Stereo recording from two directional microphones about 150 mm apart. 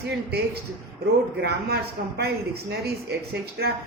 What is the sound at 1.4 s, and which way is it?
Speech, 90° right.